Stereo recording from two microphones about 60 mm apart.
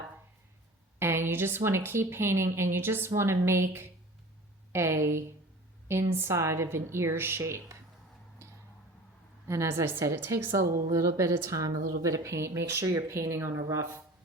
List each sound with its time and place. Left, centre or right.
0.9 s speech: right
7.4 s a woman's voice: right
9.5 s a woman's voice: right
9.8 s speech: right
10.5 s a woman's voice: right
12.2 s speech: right